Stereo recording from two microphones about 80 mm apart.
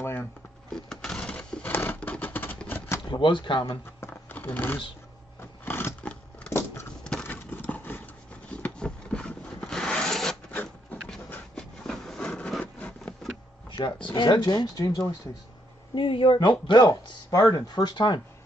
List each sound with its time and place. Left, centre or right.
0.0 s a sound: left
0.7 s a sound: centre; by 2.5 s left
3.1 s speech: left
4.0 s shuffling cards: left
5.4 s a sound: left
8.5 s rub: centre
10.5 s printer: left
11.5 s a sound: centre
13.7 s speech: left
15.9 s speech: left
16.3 s speech: left
17.3 s speech: left